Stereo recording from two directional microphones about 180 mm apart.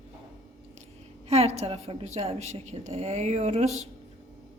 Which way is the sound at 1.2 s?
35° right (ahead or behind).